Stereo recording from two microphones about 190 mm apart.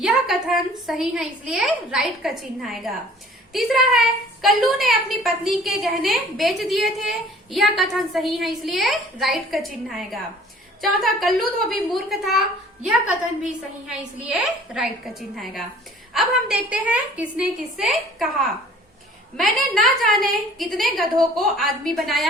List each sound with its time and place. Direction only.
0.0 s a woman's voice: centre (ahead or behind)